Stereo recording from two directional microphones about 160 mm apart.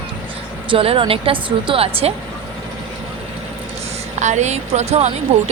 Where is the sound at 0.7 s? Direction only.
35° right (ahead or behind).